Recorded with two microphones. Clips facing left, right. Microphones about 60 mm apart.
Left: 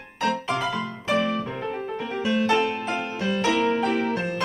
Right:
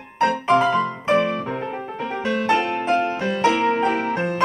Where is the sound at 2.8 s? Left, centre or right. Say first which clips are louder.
Right 7 dB; right.